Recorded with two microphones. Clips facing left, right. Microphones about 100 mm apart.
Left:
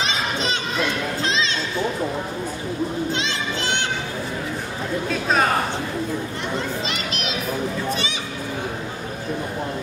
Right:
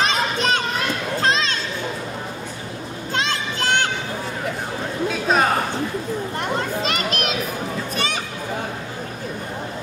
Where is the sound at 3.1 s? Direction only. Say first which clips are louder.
Right 1 dB; 50° right (ahead or behind).